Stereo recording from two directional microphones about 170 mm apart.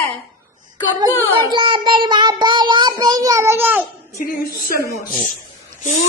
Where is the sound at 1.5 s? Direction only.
30° right (ahead or behind); by 3.8 s 15° right (ahead or behind).